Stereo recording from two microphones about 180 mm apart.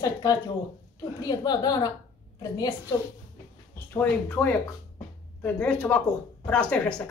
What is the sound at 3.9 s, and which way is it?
A woman's voice, 10° left (ahead or behind).